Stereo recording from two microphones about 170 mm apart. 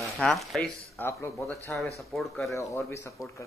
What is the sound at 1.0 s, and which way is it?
Speech, 10° left (ahead or behind).